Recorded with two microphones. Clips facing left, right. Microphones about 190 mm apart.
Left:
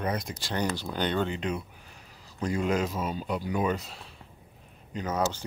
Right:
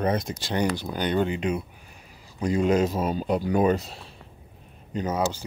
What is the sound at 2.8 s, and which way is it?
Speech, 40° right (ahead or behind).